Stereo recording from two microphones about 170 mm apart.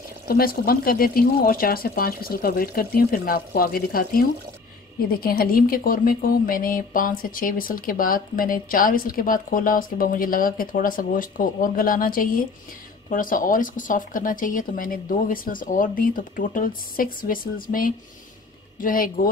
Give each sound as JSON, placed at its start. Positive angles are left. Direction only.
{"t": 0.3, "sound": "speech", "side_deg": 60}